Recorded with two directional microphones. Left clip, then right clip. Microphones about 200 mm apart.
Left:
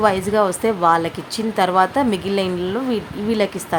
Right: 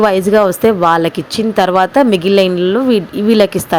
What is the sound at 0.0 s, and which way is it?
Speech, 30° right (ahead or behind).